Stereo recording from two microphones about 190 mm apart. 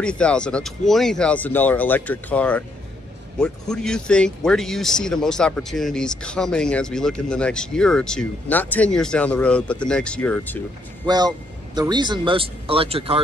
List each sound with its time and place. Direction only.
0.0 s speech: 5° left (ahead or behind)
11.1 s speech: 20° right (ahead or behind)